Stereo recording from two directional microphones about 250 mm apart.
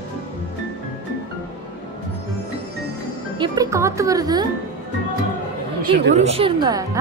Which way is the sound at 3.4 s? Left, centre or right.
Centre.